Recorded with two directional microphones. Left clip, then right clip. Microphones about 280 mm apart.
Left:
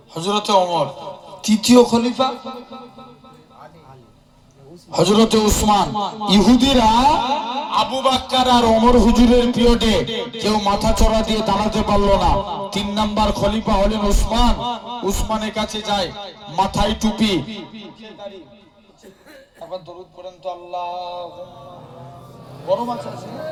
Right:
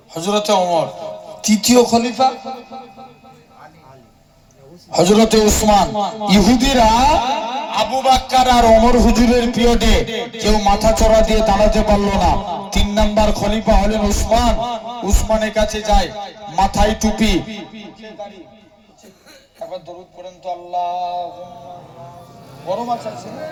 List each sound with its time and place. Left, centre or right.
0.1 s a man's voice: right
4.9 s a man's voice: right
20.2 s a man's voice: right
22.6 s a man's voice: right